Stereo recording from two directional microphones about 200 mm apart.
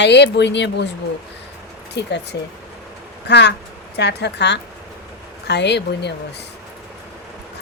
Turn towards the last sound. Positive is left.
turn(degrees=55)  # may be behind; listen again after turning